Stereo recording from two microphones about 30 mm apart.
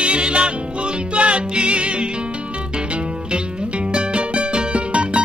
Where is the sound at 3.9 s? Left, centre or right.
Right.